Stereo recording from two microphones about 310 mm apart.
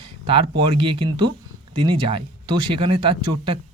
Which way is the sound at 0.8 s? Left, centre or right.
Centre.